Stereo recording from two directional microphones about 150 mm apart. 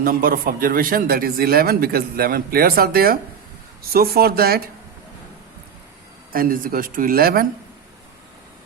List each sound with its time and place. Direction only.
0.0 s speech: 75° right (ahead or behind); by 4.7 s 90° right
6.3 s speech: 70° right (ahead or behind)